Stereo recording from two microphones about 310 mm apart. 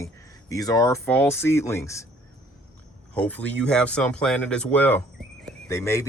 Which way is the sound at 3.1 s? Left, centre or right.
Centre.